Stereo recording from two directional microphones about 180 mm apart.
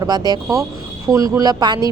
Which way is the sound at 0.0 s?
20° right (ahead or behind).